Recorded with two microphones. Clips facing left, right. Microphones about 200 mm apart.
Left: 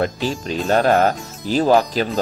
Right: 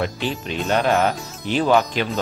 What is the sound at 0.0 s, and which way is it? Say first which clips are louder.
Speech: left 3 dB; 40° left (ahead or behind).